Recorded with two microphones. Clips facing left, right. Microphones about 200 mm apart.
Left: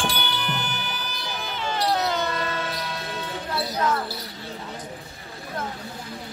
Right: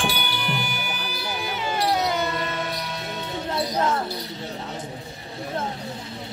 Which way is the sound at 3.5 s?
25° right (ahead or behind).